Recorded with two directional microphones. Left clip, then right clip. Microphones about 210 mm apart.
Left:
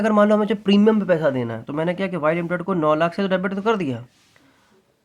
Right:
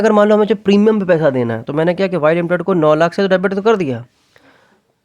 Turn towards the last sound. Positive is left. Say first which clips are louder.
# right 8 dB
turn(degrees=-30)  # may be behind; listen again after turning